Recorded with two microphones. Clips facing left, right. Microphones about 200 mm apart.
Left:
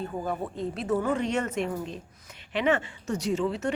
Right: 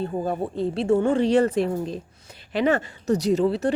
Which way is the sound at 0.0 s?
30° right (ahead or behind).